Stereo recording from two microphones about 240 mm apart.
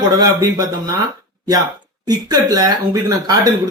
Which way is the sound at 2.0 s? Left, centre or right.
Centre.